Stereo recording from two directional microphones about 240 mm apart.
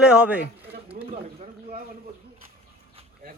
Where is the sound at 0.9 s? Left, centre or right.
Right.